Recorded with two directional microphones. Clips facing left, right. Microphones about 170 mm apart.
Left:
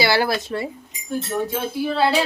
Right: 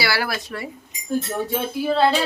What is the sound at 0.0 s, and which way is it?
Speech, 25° left (ahead or behind).